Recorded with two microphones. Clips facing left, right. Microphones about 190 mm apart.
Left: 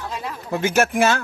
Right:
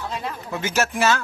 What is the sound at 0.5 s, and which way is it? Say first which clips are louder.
Speech: left 5 dB; 55° left (ahead or behind).